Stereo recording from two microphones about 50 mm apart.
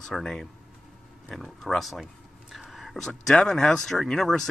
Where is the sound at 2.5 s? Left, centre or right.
Centre.